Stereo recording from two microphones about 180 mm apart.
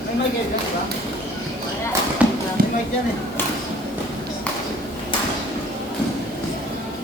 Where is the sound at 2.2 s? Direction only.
5° right (ahead or behind).